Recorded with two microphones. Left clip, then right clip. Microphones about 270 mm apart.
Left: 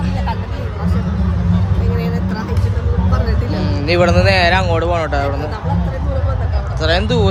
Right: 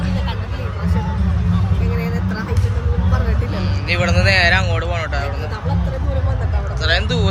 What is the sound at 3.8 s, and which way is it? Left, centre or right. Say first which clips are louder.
Speech: left 5 dB; left.